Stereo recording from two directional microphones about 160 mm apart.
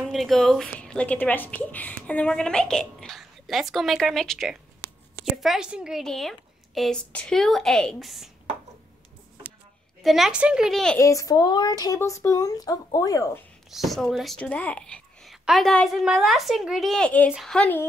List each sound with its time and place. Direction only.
0.0 s a woman's voice: centre (ahead or behind)
10.0 s a woman's voice: centre (ahead or behind)
11.0 s speech: 20° left (ahead or behind)
13.7 s a woman's voice: centre (ahead or behind)